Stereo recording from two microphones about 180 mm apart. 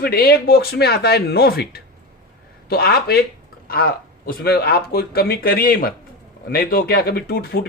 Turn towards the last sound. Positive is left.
turn(degrees=55)  # may be behind; listen again after turning